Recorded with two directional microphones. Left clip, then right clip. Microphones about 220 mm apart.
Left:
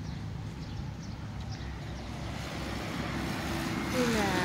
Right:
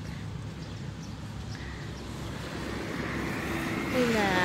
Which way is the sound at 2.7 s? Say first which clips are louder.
Right 3 dB; 35° left (ahead or behind).